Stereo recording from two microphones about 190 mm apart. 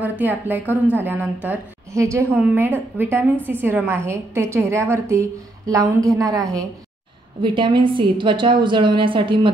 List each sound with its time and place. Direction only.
0.0 s a woman's voice: 10° right (ahead or behind); by 9.5 s 25° right (ahead or behind)